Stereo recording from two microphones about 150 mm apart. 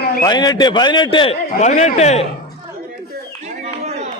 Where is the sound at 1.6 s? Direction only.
50° left (ahead or behind).